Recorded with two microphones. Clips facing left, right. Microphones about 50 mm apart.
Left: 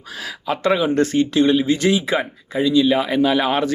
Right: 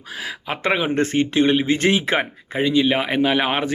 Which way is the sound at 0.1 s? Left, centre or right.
Right.